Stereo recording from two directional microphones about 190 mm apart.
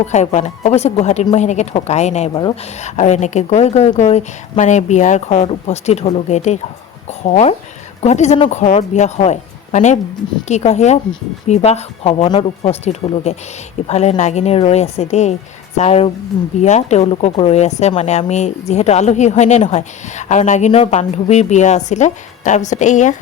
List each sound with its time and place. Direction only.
0.0 s speech: 35° left (ahead or behind)